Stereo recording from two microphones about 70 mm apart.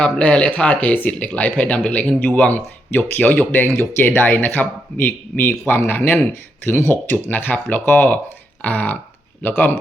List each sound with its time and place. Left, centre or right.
0.0 s speech: centre
2.5 s speech: left